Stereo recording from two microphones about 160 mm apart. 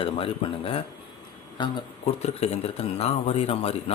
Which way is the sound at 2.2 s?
40° left (ahead or behind).